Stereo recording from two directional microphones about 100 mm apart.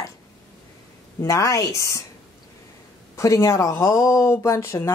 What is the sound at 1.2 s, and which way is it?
Speech, 35° left (ahead or behind).